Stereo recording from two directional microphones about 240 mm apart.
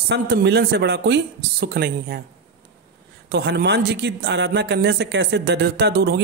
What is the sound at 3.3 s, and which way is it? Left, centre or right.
Speech, right.